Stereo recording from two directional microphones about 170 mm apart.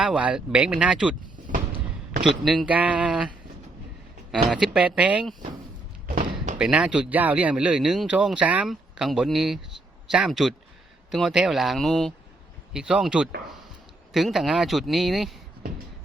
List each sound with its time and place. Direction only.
0.0 s speech: 5° right (ahead or behind)
2.3 s speech: centre (ahead or behind)
6.1 s slam: 45° right (ahead or behind)
6.6 s speech: 5° right (ahead or behind)